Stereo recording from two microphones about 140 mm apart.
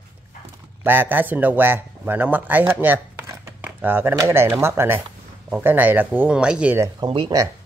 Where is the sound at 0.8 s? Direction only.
15° right (ahead or behind).